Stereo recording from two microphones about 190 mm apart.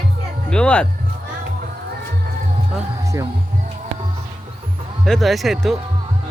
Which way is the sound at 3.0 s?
15° right (ahead or behind).